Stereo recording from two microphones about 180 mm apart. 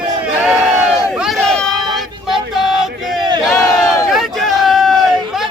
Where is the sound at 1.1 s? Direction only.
Centre (ahead or behind).